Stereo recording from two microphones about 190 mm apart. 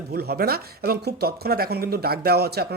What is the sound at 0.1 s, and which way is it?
Speech, 55° right (ahead or behind).